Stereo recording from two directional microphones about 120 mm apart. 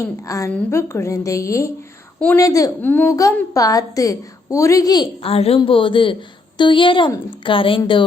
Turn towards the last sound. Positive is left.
turn(degrees=45)  # may be behind; listen again after turning